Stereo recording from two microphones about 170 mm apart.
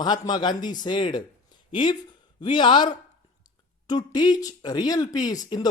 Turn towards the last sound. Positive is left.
turn(degrees=25)  # may be behind; listen again after turning